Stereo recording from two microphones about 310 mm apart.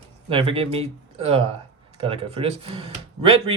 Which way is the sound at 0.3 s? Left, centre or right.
Centre.